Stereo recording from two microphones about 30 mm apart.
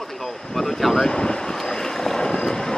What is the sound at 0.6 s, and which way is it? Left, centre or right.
Wind, centre.